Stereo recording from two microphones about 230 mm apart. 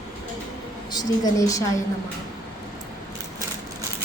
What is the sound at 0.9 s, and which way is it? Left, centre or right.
Speech, centre.